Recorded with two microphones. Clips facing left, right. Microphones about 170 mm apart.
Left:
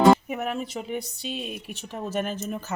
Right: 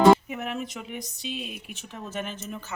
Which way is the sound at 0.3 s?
45° left (ahead or behind).